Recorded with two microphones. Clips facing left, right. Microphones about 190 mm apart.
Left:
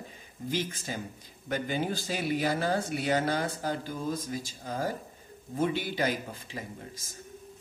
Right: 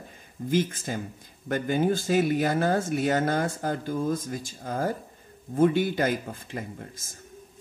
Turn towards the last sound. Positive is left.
turn(degrees=-50)  # may be behind; listen again after turning